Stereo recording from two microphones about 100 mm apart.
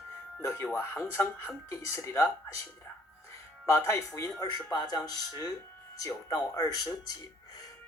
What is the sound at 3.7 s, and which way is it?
Speech, 30° left (ahead or behind).